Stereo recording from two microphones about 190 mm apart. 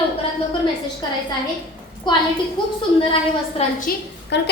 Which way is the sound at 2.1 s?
25° left (ahead or behind).